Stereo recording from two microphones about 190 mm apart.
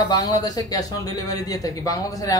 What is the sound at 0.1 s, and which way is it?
Speech, 20° left (ahead or behind).